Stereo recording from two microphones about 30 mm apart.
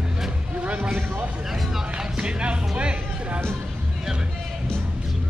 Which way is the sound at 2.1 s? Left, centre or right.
Right.